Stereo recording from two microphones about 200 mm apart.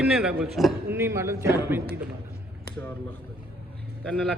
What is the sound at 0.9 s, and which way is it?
A man's voice, 15° right (ahead or behind).